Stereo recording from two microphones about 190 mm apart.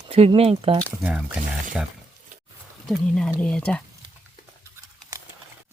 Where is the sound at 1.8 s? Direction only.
5° right (ahead or behind).